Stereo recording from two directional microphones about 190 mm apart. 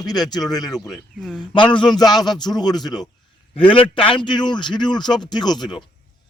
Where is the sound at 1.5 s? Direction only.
25° left (ahead or behind).